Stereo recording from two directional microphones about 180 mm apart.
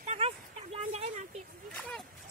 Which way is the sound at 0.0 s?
40° right (ahead or behind).